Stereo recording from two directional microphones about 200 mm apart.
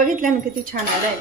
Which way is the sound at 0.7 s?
45° right (ahead or behind).